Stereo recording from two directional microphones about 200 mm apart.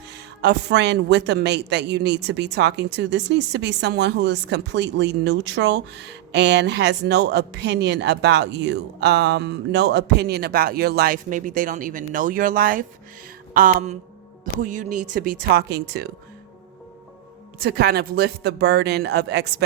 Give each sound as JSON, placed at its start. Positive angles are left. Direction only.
{"t": 0.4, "sound": "speech", "side_deg": -60}
{"t": 13.5, "sound": "a sound", "side_deg": -40}
{"t": 14.6, "sound": "speech", "side_deg": -40}
{"t": 17.6, "sound": "speech", "side_deg": -50}